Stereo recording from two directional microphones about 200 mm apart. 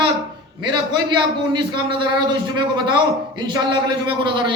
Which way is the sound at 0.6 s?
20° right (ahead or behind).